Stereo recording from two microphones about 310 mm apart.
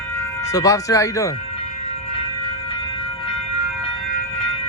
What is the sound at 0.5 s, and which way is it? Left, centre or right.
Speech, centre.